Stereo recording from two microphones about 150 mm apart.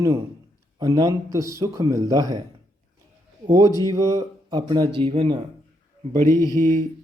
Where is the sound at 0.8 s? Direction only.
25° right (ahead or behind).